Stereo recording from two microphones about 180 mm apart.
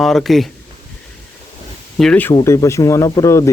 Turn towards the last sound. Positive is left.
turn(degrees=15)  # may be behind; listen again after turning